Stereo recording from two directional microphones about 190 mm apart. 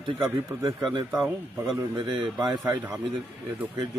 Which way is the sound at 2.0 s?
25° right (ahead or behind).